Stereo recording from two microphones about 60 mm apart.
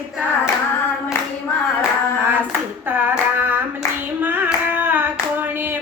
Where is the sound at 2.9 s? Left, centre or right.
Right.